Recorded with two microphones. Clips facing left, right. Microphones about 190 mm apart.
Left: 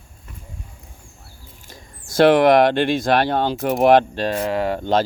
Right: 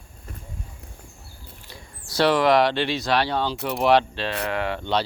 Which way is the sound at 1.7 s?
45° left (ahead or behind).